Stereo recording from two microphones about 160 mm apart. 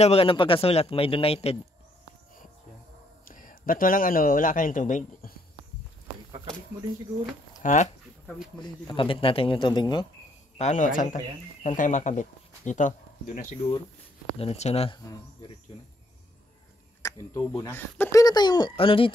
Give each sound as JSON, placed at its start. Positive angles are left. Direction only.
{"t": 0.0, "sound": "speech", "side_deg": 35}
{"t": 3.3, "sound": "a man's voice", "side_deg": 60}
{"t": 7.6, "sound": "speech", "side_deg": 50}
{"t": 8.5, "sound": "speech", "side_deg": 30}
{"t": 10.6, "sound": "speech", "side_deg": 50}
{"t": 14.4, "sound": "speech", "side_deg": 40}
{"t": 17.3, "sound": "speech", "side_deg": 15}
{"t": 18.2, "sound": "speech", "side_deg": 25}